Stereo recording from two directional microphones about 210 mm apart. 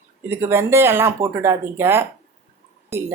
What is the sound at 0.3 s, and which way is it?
Speech, 10° right (ahead or behind).